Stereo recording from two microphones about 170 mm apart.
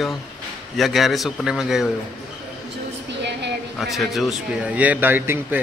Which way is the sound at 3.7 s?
Centre (ahead or behind).